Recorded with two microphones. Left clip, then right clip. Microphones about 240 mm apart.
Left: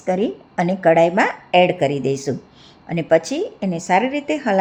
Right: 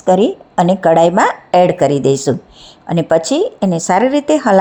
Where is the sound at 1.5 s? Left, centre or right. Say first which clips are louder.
Right 3 dB; centre.